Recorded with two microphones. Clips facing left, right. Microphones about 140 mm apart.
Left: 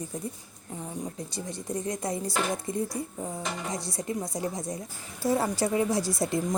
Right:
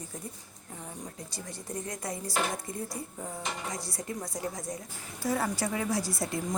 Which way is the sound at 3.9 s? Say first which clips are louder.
Left 5 dB; 20° left (ahead or behind).